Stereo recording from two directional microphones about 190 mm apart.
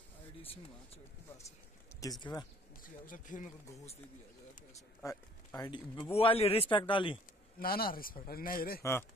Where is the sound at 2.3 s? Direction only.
25° left (ahead or behind).